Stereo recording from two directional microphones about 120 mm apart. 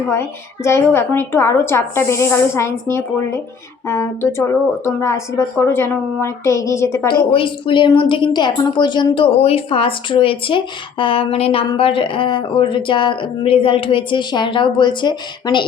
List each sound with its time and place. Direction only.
0.6 s speech: 20° left (ahead or behind)
7.3 s a woman's voice: 45° left (ahead or behind)